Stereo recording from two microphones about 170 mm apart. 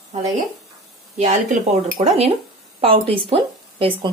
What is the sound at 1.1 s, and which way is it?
Speech, 45° right (ahead or behind).